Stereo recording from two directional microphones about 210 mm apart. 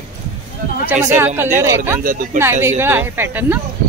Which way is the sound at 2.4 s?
10° right (ahead or behind).